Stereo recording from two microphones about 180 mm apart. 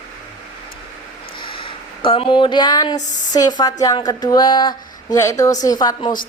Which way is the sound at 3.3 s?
20° left (ahead or behind).